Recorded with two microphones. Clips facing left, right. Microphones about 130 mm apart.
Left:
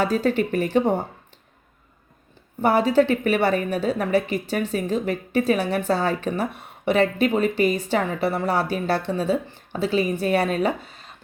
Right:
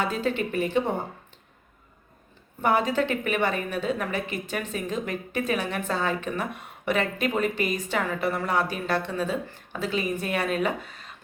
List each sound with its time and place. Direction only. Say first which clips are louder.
0.0 s a woman's voice: left 6 dB; 40° left (ahead or behind)
2.6 s a woman's voice: left 5 dB; 35° left (ahead or behind)